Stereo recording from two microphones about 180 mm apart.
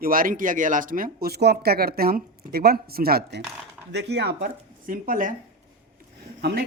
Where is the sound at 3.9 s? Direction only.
70° right (ahead or behind); by 5.4 s 50° right (ahead or behind).